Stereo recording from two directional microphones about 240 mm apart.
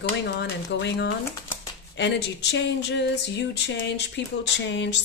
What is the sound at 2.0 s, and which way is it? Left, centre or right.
Speech, left.